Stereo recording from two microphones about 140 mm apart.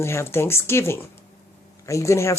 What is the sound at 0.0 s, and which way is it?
Speech, 20° left (ahead or behind).